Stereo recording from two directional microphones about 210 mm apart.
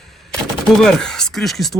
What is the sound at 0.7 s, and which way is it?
Speech, 5° left (ahead or behind).